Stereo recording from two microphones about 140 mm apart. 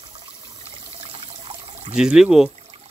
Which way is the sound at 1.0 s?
45° right (ahead or behind).